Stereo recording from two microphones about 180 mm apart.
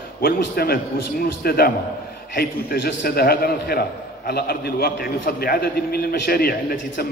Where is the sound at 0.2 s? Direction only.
60° left (ahead or behind).